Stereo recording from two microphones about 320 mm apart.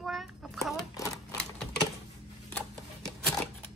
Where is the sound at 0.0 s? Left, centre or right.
Centre.